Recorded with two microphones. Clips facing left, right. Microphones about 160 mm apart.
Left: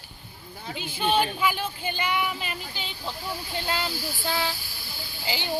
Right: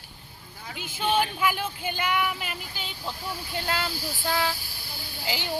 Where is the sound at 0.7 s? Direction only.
50° right (ahead or behind).